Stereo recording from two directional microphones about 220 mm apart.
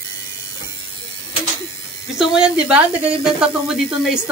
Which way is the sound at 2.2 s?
5° right (ahead or behind).